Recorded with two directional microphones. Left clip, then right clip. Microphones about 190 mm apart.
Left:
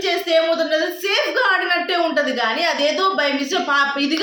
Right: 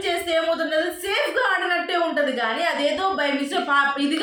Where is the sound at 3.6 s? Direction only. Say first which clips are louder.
Left 1 dB; 20° left (ahead or behind).